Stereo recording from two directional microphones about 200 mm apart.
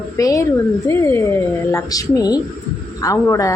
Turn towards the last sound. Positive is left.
turn(degrees=15)  # may be behind; listen again after turning